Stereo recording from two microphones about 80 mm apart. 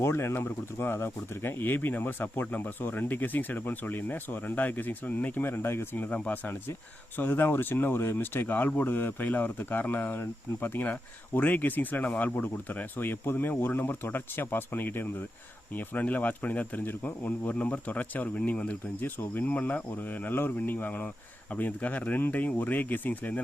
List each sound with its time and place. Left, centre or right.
0.0 s speech: left
6.1 s speech: centre